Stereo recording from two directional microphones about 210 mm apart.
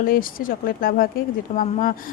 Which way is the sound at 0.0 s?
40° left (ahead or behind).